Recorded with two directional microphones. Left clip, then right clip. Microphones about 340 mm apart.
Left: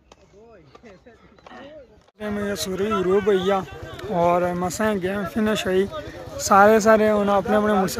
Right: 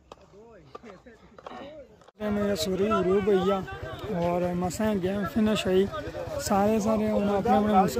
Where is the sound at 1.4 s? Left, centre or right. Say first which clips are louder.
Even; right.